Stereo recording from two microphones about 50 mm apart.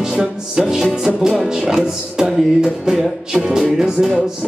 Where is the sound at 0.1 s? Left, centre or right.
Centre.